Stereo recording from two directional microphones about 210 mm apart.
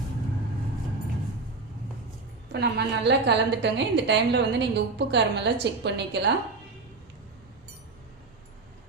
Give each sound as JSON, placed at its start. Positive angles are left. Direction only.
{"t": 2.5, "sound": "a woman's voice", "side_deg": -55}